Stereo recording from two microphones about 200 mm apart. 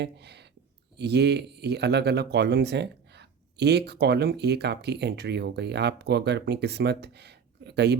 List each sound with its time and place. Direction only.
0.0 s a man's voice: 55° right (ahead or behind)